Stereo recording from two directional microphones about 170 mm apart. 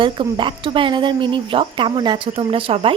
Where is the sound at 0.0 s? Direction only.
30° right (ahead or behind).